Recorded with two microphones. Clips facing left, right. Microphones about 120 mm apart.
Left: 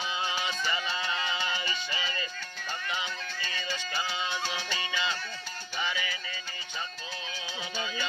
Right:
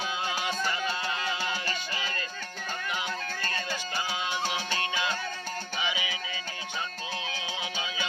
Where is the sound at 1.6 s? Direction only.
50° right (ahead or behind).